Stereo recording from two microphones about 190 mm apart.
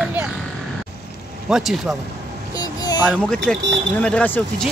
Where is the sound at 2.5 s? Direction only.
20° left (ahead or behind).